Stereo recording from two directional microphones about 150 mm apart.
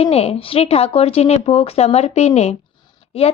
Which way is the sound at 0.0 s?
45° left (ahead or behind).